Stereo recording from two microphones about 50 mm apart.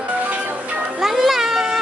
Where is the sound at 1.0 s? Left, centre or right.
Centre.